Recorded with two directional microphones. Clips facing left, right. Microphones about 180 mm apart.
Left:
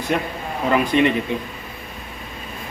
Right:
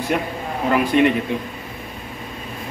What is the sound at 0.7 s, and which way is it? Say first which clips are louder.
Speech: right 1 dB; 5° right (ahead or behind).